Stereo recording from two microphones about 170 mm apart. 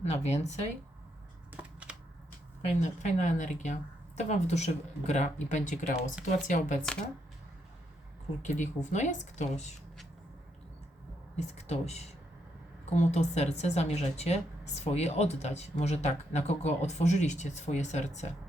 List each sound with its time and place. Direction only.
0.0 s speech: 40° left (ahead or behind)
2.8 s speech: 45° left (ahead or behind)
8.4 s speech: 45° left (ahead or behind)
11.3 s a woman's voice: 40° left (ahead or behind)